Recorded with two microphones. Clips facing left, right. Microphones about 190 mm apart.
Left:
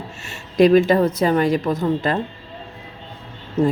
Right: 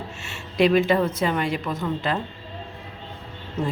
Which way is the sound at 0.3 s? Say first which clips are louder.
Left 6 dB; 40° left (ahead or behind).